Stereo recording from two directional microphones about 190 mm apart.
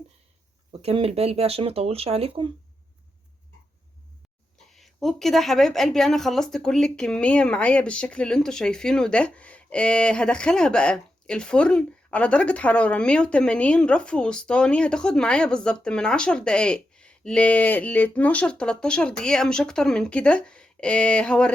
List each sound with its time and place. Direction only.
0.8 s speech: 30° right (ahead or behind)
4.5 s speech: centre (ahead or behind)